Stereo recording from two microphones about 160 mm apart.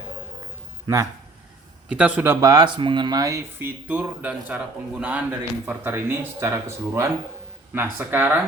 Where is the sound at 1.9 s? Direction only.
10° right (ahead or behind).